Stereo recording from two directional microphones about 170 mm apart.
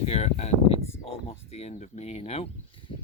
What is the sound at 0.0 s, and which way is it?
Speech, 40° left (ahead or behind).